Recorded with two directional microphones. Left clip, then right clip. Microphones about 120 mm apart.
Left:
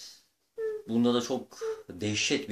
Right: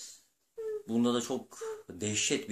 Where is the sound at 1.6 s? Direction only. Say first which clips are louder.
Left 5 dB; 25° right (ahead or behind).